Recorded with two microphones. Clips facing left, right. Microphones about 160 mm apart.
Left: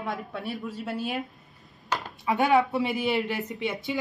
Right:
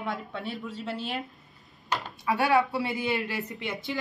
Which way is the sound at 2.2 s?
20° left (ahead or behind).